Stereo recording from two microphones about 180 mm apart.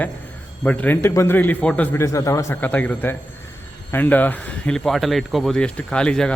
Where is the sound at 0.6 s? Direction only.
10° left (ahead or behind).